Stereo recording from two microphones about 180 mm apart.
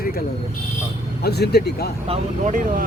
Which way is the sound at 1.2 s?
65° left (ahead or behind).